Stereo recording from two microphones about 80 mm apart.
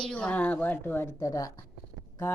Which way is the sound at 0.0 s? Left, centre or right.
Centre.